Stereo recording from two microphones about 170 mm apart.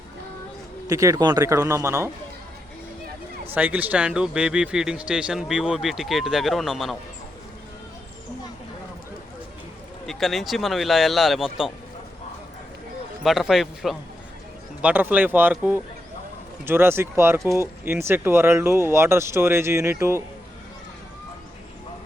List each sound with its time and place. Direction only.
0.9 s speech: 20° right (ahead or behind)
3.5 s speech: 10° right (ahead or behind)
10.1 s speech: centre (ahead or behind)
13.2 s speech: centre (ahead or behind)